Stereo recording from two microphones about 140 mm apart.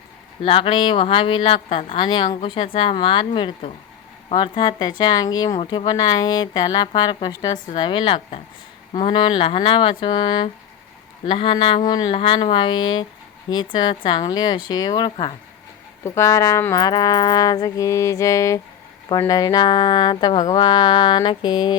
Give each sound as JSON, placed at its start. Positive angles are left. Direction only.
{"t": 0.4, "sound": "music", "side_deg": 40}
{"t": 4.4, "sound": "speech", "side_deg": 35}
{"t": 6.8, "sound": "music", "side_deg": 30}
{"t": 16.0, "sound": "speech", "side_deg": 20}
{"t": 19.3, "sound": "music", "side_deg": 25}